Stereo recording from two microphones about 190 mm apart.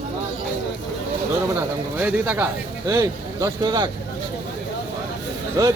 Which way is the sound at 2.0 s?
10° right (ahead or behind).